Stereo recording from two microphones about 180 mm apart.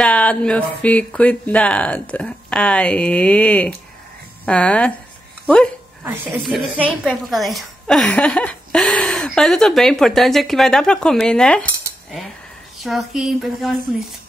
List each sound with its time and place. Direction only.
0.0 s speech: 5° left (ahead or behind)
6.0 s a woman's voice: 10° right (ahead or behind)
12.7 s a woman's voice: centre (ahead or behind)